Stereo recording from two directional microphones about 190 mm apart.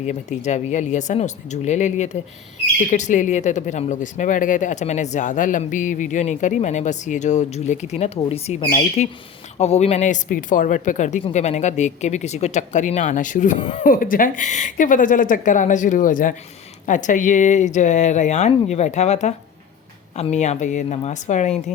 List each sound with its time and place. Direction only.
0.0 s speech: 35° left (ahead or behind)
13.6 s speech: 25° left (ahead or behind)
13.8 s speech: 45° left (ahead or behind)